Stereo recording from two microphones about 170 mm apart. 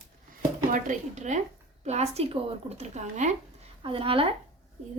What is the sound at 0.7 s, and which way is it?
Speech, 50° right (ahead or behind).